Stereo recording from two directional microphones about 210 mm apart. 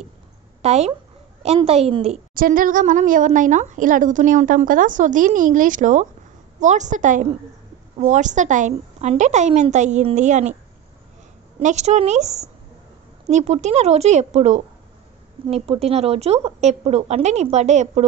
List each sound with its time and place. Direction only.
0.6 s a woman's voice: 30° right (ahead or behind)
2.3 s speech: 40° right (ahead or behind)
11.6 s speech: 35° right (ahead or behind)